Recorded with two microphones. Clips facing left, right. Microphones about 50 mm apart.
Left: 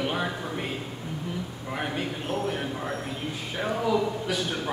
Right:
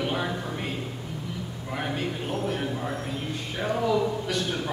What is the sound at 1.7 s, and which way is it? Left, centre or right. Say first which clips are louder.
A man's voice: right 1 dB; centre.